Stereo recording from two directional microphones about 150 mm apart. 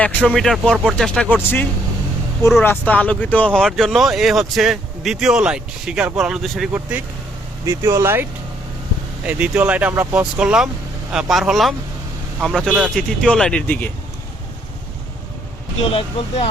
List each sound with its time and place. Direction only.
0.0 s speech: 10° left (ahead or behind)
2.6 s speech: 10° left (ahead or behind)
7.6 s speech: 20° right (ahead or behind); by 13.9 s 10° left (ahead or behind)
15.8 s speech: 40° left (ahead or behind)